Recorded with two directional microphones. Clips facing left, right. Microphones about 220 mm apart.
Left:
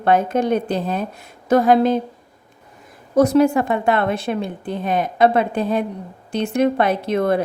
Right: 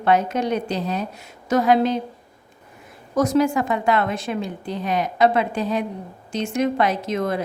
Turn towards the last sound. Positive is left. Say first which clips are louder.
# left 5 dB
turn(degrees=60)  # may be behind; listen again after turning